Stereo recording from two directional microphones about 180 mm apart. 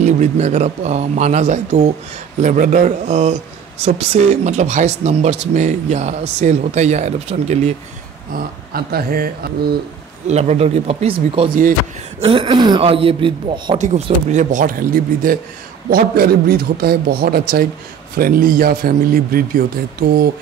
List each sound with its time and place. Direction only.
0.0 s a man's voice: 40° right (ahead or behind)
8.3 s a man's voice: 55° right (ahead or behind)
10.2 s a man's voice: 40° right (ahead or behind); by 20.2 s 55° right (ahead or behind)